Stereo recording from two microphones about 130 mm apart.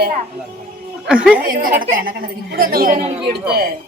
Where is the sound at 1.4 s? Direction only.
90° right.